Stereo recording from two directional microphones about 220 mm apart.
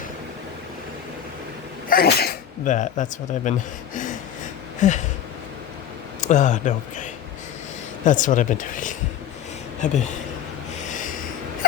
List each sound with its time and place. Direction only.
1.9 s speech: 40° left (ahead or behind)
4.8 s speech: 35° left (ahead or behind)
6.1 s speech: 35° left (ahead or behind)
10.8 s snort: 35° left (ahead or behind)